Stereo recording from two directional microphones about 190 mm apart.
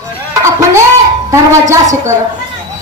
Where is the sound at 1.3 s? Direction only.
15° right (ahead or behind).